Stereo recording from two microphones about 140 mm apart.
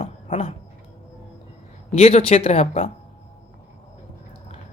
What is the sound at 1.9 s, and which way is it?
Speech, 50° left (ahead or behind).